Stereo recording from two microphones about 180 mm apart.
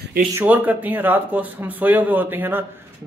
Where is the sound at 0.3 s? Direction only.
10° right (ahead or behind).